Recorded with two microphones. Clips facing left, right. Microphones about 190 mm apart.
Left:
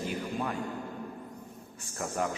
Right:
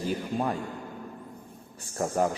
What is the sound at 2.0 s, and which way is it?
Speech, 35° right (ahead or behind).